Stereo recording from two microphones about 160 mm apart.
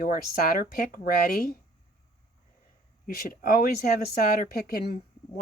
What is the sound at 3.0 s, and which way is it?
Speech, 60° left (ahead or behind).